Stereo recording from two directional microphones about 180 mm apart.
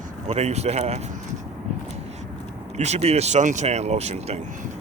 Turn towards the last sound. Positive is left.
turn(degrees=-35)  # may be behind; listen again after turning